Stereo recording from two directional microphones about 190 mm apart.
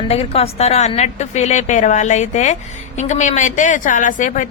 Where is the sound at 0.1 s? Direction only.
30° left (ahead or behind).